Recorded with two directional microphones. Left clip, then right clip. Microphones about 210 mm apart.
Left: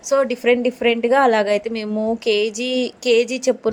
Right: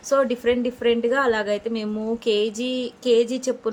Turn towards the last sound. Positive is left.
turn(degrees=25)  # may be behind; listen again after turning